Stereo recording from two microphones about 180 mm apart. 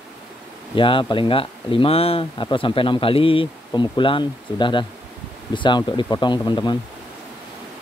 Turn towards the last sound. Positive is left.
turn(degrees=25)  # may be behind; listen again after turning